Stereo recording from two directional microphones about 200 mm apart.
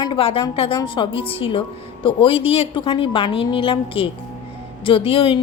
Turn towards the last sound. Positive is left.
turn(degrees=25)  # may be behind; listen again after turning